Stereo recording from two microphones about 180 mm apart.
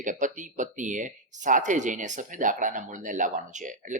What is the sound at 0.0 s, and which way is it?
Speech, 45° right (ahead or behind).